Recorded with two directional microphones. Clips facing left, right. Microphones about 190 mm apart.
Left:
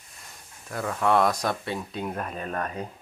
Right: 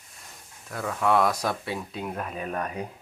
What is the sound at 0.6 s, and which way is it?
Speech, centre (ahead or behind).